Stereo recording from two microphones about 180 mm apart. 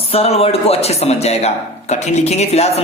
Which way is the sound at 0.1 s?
35° left (ahead or behind).